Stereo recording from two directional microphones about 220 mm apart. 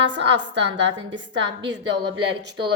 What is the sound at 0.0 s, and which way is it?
A woman's voice, 55° right (ahead or behind).